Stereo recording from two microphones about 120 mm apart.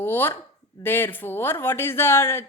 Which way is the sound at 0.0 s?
15° left (ahead or behind).